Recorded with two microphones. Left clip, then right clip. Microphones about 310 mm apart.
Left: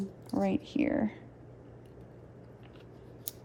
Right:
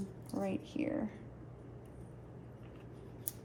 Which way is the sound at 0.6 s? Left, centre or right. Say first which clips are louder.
Left 7 dB; left.